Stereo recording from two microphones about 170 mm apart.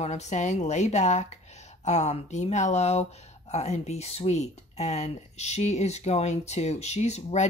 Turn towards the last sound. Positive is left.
turn(degrees=40)  # may be behind; listen again after turning